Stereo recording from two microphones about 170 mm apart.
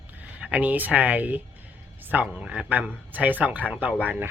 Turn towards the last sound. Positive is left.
turn(degrees=-10)  # may be behind; listen again after turning